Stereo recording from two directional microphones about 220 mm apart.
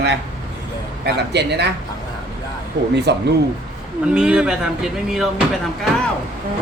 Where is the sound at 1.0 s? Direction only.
50° right (ahead or behind).